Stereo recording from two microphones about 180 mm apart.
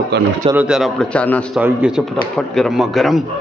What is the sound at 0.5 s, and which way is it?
Speech, 5° right (ahead or behind).